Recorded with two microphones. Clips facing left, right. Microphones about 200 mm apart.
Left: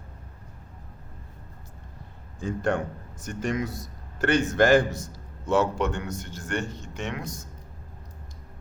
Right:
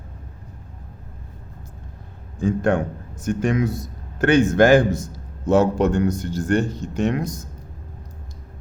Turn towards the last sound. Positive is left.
turn(degrees=-40)  # may be behind; listen again after turning